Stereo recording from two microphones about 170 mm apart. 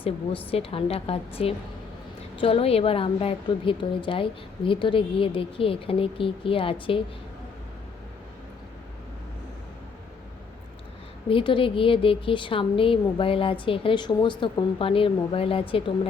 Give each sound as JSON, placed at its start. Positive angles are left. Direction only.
{"t": 0.0, "sound": "a woman's voice", "side_deg": 35}
{"t": 11.3, "sound": "a woman's voice", "side_deg": 30}